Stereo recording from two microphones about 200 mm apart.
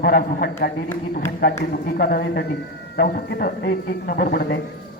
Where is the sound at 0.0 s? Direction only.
50° left (ahead or behind).